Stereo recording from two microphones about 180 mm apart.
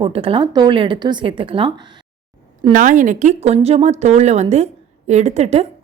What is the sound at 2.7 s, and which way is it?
Speech, 45° right (ahead or behind).